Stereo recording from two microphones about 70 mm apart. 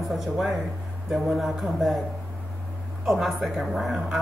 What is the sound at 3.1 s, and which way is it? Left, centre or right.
Speech, centre.